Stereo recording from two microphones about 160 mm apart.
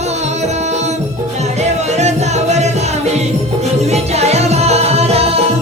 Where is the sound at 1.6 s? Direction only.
45° right (ahead or behind).